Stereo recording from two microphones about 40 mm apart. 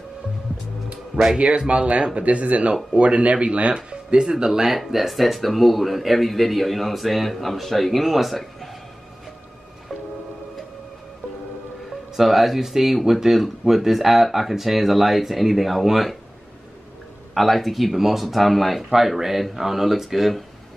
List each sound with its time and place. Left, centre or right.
1.4 s speech: right; by 8.4 s centre
12.2 s speech: centre
17.3 s speech: centre